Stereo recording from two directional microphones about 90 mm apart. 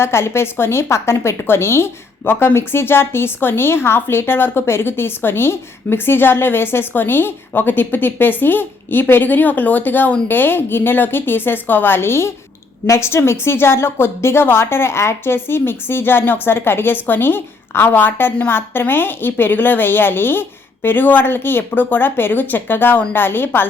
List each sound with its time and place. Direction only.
0.0 s a woman's voice: 30° left (ahead or behind)